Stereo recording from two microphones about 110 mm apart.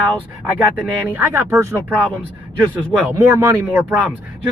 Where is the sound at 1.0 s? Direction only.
20° right (ahead or behind).